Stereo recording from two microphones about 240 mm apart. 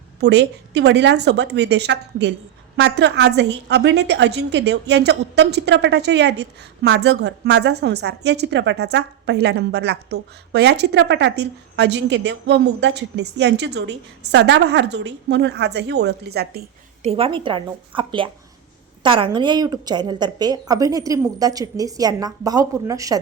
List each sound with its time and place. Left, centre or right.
0.2 s a woman's voice: right
17.0 s a woman's voice: right